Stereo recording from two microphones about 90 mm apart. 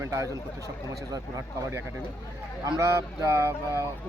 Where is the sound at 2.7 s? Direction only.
35° right (ahead or behind).